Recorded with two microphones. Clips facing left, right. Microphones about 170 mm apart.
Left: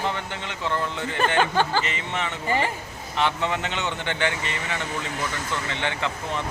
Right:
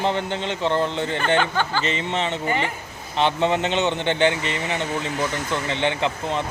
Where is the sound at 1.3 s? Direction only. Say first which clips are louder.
Left 1 dB; 35° left (ahead or behind).